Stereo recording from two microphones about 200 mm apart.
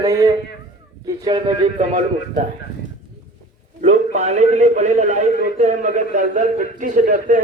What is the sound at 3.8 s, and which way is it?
A man's voice, 35° right (ahead or behind).